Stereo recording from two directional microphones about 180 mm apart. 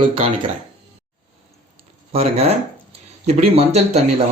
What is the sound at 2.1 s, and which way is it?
Speech, 35° right (ahead or behind).